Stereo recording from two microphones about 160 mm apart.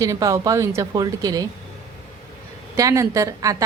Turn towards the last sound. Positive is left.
turn(degrees=-20)  # may be behind; listen again after turning